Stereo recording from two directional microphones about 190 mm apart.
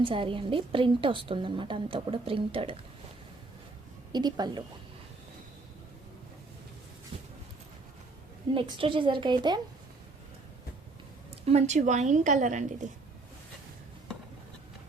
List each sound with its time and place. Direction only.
0.0 s a woman's voice: 25° right (ahead or behind)
4.1 s a woman's voice: 20° right (ahead or behind)
7.1 s a sound: 30° right (ahead or behind)
8.5 s a woman's voice: 25° right (ahead or behind)
11.4 s a woman's voice: 35° right (ahead or behind)